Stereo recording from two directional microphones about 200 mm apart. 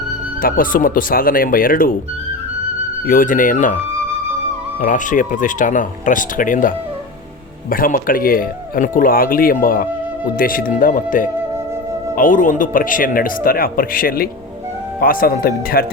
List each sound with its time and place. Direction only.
0.4 s speech: 45° left (ahead or behind)
3.1 s speech: 45° left (ahead or behind)
4.8 s speech: 40° left (ahead or behind)